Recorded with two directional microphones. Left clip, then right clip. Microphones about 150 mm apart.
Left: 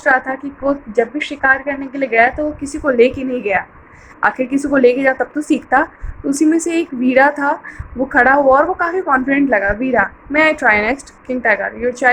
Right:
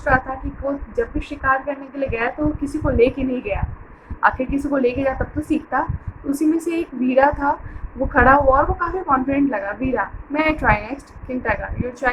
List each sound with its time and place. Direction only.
0.6 s a woman's voice: 45° left (ahead or behind)